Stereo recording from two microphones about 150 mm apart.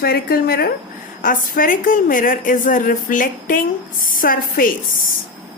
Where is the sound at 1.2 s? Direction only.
65° left (ahead or behind).